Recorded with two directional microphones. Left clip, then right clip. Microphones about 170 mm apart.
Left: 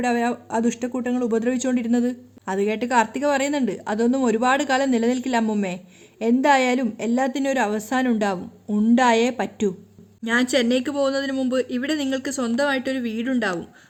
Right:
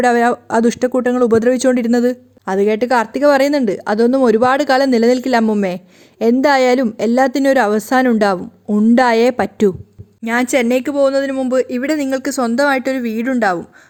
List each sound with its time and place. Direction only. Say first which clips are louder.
0.0 s a woman's voice: right 10 dB; 45° right (ahead or behind)